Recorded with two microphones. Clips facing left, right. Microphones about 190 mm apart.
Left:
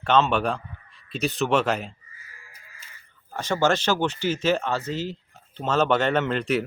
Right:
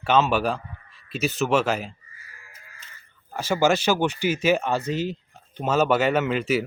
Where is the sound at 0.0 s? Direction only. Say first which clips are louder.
Even; 5° right (ahead or behind).